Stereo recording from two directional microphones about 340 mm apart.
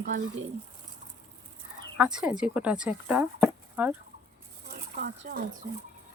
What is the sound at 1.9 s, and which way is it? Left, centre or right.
Speech, centre.